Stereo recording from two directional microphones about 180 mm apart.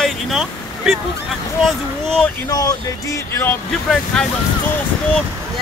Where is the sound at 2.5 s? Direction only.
20° left (ahead or behind).